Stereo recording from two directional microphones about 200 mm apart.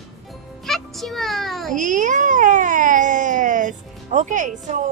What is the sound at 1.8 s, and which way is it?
Baby cry, 40° right (ahead or behind).